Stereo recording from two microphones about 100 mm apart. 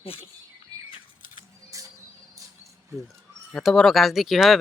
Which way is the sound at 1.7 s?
30° right (ahead or behind).